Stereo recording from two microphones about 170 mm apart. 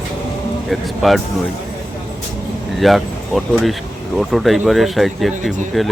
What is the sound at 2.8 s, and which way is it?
Speech, centre (ahead or behind).